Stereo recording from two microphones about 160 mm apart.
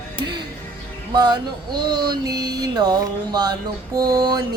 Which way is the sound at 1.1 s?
25° right (ahead or behind).